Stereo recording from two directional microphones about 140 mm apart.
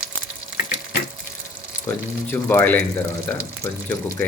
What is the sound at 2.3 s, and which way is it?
Speech, 15° left (ahead or behind).